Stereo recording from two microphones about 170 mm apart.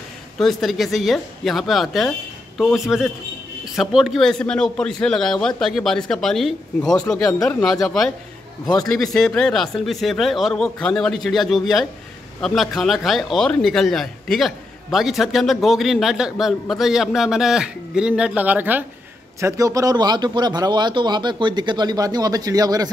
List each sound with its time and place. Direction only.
0.4 s speech: centre (ahead or behind)
19.4 s speech: 20° right (ahead or behind)